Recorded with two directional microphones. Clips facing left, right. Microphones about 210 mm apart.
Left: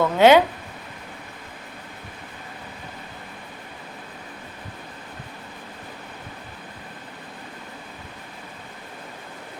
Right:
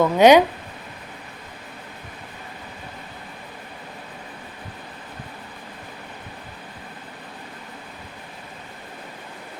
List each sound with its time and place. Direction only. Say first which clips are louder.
0.0 s speech: right 2 dB; 15° right (ahead or behind)